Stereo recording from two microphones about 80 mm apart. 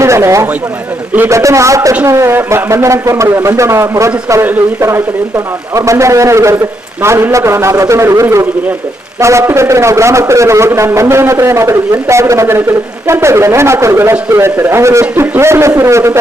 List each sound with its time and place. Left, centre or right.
0.0 s a man's voice: right